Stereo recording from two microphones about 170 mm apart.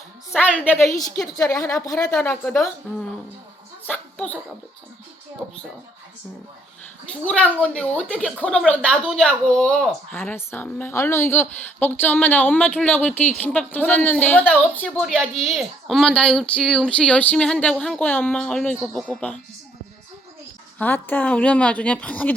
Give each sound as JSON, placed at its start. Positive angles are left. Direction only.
{"t": 0.3, "sound": "a woman's voice", "side_deg": 10}
{"t": 3.8, "sound": "speech", "side_deg": 10}
{"t": 5.4, "sound": "speech", "side_deg": 0}
{"t": 7.1, "sound": "a woman's voice", "side_deg": 5}
{"t": 20.7, "sound": "a woman's voice", "side_deg": 10}